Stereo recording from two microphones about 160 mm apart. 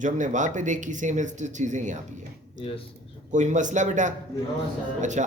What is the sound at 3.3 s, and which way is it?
A man's voice, 50° right (ahead or behind).